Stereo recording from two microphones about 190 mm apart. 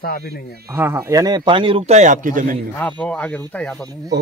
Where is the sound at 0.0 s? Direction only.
55° left (ahead or behind).